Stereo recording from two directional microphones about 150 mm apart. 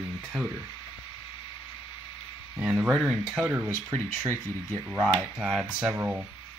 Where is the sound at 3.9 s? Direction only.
20° right (ahead or behind).